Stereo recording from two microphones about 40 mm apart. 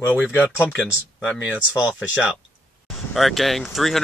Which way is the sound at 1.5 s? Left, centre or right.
Right.